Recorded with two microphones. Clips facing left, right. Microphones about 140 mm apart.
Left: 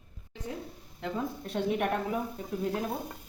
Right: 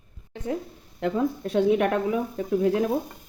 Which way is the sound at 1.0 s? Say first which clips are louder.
Right 9 dB; 90° right.